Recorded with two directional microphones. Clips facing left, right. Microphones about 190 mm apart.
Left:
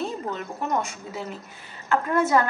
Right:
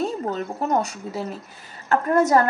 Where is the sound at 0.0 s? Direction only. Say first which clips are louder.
Right 5 dB; 35° right (ahead or behind).